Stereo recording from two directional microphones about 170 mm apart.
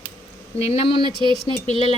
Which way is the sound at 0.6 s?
35° left (ahead or behind).